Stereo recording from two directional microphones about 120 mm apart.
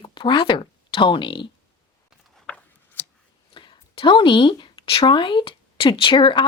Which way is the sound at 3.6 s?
45° left (ahead or behind).